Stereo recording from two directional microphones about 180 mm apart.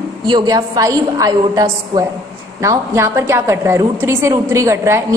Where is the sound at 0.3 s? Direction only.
20° right (ahead or behind).